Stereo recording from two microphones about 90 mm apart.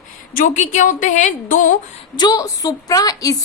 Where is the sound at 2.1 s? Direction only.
50° left (ahead or behind).